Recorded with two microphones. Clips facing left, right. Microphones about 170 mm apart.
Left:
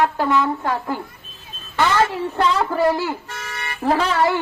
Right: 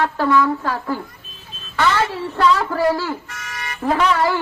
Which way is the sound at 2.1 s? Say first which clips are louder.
Right 2 dB; 20° left (ahead or behind).